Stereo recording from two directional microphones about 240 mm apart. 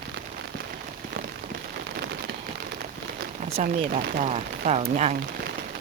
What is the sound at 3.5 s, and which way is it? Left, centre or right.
Speech, right.